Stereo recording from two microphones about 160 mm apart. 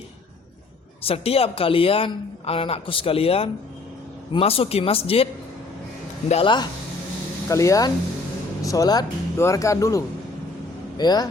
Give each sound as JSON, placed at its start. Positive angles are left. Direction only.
{"t": 1.0, "sound": "speech", "side_deg": 40}
{"t": 7.4, "sound": "speech", "side_deg": 20}